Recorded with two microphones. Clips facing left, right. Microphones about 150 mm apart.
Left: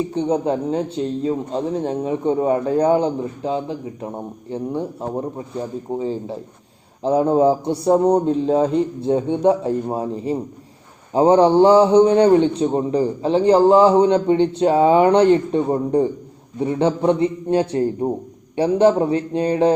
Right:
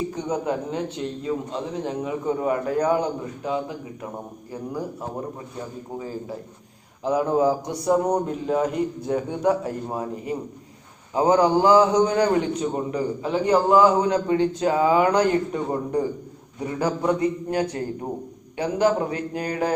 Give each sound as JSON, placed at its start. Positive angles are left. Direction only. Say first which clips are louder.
{"t": 0.1, "sound": "a man's voice", "louder": "left 6 dB", "side_deg": 30}